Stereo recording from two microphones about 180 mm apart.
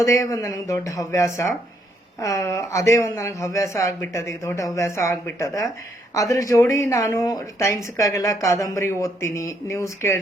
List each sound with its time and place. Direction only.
0.0 s speech: 20° left (ahead or behind)